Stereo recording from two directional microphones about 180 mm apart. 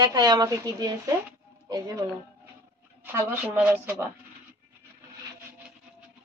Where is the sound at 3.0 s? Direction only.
10° right (ahead or behind).